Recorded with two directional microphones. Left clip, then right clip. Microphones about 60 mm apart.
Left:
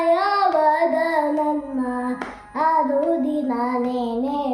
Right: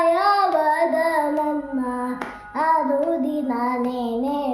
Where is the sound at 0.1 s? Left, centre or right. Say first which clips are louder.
Even; right.